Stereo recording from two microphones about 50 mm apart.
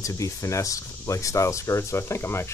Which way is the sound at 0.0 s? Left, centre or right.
Left.